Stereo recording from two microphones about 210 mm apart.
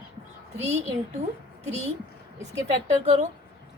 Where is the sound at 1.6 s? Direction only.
30° right (ahead or behind).